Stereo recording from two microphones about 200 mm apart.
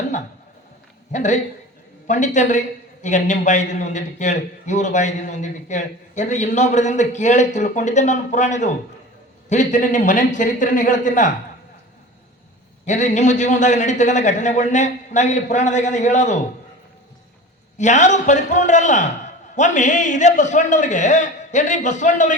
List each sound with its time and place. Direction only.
1.1 s a man's voice: 35° left (ahead or behind)
12.8 s a man's voice: 35° left (ahead or behind)
17.7 s a man's voice: 35° left (ahead or behind)